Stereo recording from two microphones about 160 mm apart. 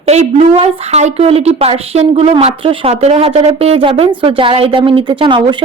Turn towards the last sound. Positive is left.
turn(degrees=-30)  # may be behind; listen again after turning